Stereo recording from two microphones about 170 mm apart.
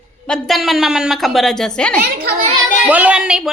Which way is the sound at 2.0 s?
65° right (ahead or behind).